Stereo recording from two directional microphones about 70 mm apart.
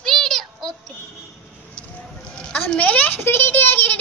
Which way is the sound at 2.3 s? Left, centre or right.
Centre.